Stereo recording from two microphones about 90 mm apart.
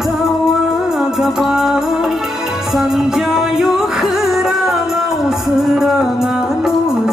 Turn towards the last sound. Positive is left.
turn(degrees=-5)  # may be behind; listen again after turning